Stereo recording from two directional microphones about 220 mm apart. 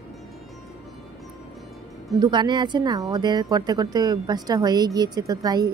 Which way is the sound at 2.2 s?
20° right (ahead or behind).